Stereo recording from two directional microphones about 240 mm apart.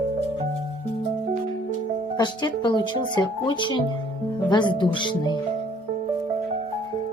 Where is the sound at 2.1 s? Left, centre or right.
Centre.